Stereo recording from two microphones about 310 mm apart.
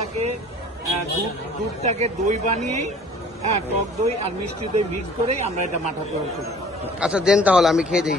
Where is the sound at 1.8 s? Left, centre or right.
Right.